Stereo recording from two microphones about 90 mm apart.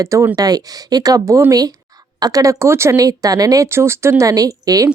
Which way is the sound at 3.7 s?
30° right (ahead or behind).